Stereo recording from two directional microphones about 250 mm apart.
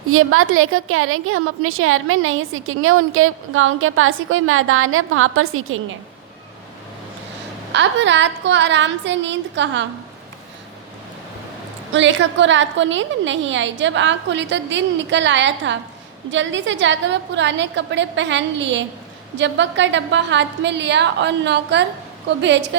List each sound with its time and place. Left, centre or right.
0.1 s a woman's voice: right
7.7 s a woman's voice: right
11.9 s a woman's voice: right